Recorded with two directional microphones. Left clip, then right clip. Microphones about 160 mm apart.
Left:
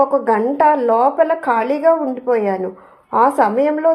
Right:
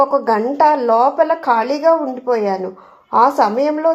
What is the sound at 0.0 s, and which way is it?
A woman's voice, 25° left (ahead or behind).